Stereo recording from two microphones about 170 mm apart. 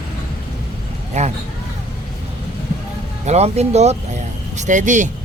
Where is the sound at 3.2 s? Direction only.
40° right (ahead or behind).